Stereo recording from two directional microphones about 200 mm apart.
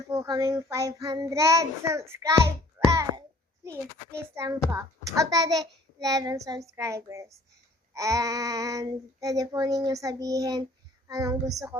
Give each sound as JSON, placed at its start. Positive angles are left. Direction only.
{"t": 0.1, "sound": "child singing", "side_deg": -15}
{"t": 2.7, "sound": "a sound", "side_deg": -15}
{"t": 4.7, "sound": "child singing", "side_deg": -15}